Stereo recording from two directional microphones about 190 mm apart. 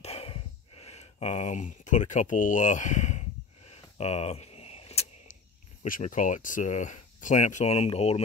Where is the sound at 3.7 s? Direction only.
35° left (ahead or behind).